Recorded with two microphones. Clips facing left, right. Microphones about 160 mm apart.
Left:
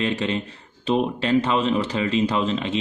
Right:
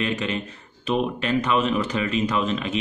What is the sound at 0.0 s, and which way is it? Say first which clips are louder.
A man's voice: left 2 dB; 30° left (ahead or behind).